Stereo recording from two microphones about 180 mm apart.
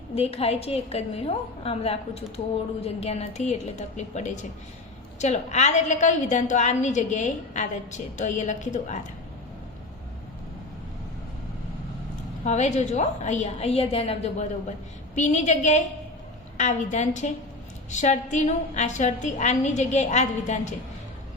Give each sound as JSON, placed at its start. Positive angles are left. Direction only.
{"t": 0.1, "sound": "a woman's voice", "side_deg": 35}
{"t": 12.5, "sound": "a woman's voice", "side_deg": 40}